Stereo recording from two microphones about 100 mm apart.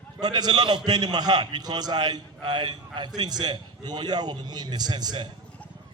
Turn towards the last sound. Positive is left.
turn(degrees=-45)  # may be behind; listen again after turning